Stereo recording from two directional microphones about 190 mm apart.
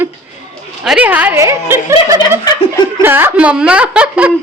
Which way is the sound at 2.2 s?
20° left (ahead or behind).